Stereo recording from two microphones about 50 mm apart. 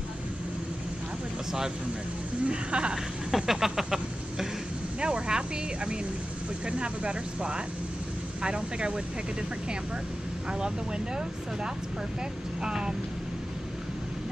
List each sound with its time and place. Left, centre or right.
2.4 s speech: right
3.3 s a sound: centre
5.0 s speech: centre
6.6 s speech: right
12.6 s speech: centre